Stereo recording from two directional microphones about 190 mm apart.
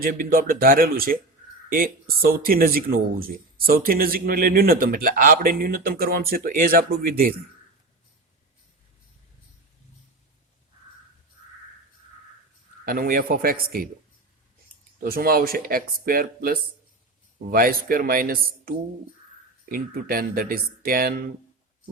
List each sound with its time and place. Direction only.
0.0 s speech: 50° right (ahead or behind)
12.8 s speech: 50° right (ahead or behind)
15.0 s speech: 50° right (ahead or behind)